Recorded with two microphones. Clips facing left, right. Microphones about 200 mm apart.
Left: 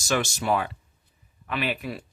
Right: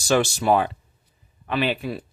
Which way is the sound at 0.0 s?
30° right (ahead or behind).